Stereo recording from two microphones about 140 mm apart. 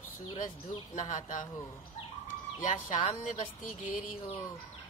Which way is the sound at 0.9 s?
60° left (ahead or behind).